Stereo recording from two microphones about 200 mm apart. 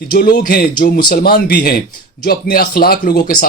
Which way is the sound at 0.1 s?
50° left (ahead or behind).